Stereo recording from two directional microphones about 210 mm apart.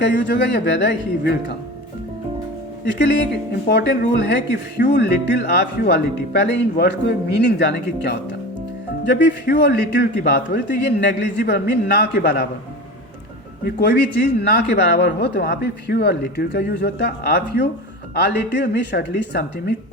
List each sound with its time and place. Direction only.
0.0 s speech: 55° left (ahead or behind)
3.7 s speech: 55° left (ahead or behind)
13.7 s speech: 50° left (ahead or behind)